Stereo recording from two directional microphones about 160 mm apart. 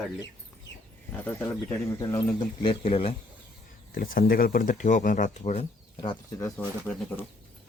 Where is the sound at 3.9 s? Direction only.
65° left (ahead or behind); by 5.6 s 45° left (ahead or behind).